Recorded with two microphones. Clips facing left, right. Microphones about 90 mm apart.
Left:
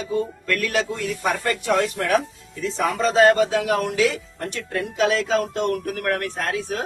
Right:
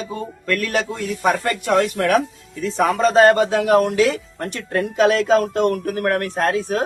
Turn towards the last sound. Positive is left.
turn(degrees=-40)  # may be behind; listen again after turning